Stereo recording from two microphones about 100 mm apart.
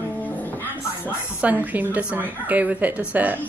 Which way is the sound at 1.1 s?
15° right (ahead or behind).